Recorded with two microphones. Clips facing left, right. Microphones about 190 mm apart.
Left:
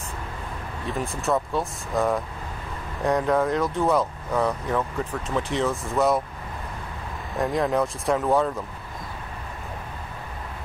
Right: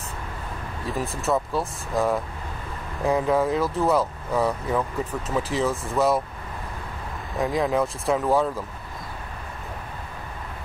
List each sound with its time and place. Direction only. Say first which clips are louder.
0.8 s speech: even; centre (ahead or behind)
7.3 s speech: even; centre (ahead or behind)